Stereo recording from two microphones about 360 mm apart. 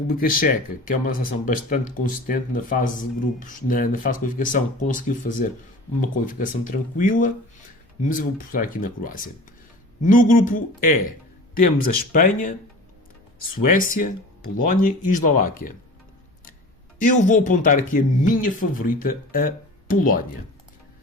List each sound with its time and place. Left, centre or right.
0.2 s speech: left
13.7 s speech: left
17.0 s speech: left